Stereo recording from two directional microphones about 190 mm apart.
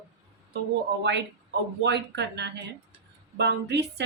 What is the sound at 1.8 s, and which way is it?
Speech, 65° right (ahead or behind).